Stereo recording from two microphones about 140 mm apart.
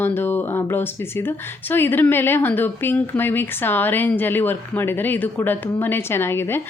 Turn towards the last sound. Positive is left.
turn(degrees=15)  # may be behind; listen again after turning